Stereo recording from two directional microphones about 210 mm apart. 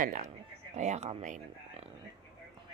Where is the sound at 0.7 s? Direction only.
35° right (ahead or behind).